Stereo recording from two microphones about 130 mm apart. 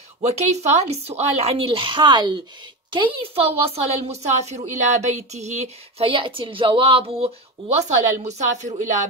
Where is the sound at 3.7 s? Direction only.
55° right (ahead or behind).